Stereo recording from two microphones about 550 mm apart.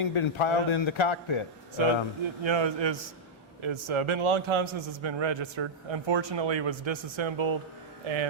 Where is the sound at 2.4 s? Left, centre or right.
Right.